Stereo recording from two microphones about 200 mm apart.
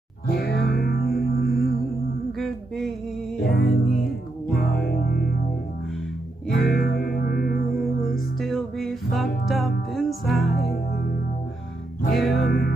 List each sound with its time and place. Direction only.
0.3 s music: 50° left (ahead or behind)
2.3 s humming: centre (ahead or behind)
3.4 s music: 50° left (ahead or behind)
6.5 s music: 50° left (ahead or behind)
8.4 s music: centre (ahead or behind)
10.5 s music: 50° left (ahead or behind)
12.1 s music: centre (ahead or behind)
12.4 s music: 55° left (ahead or behind)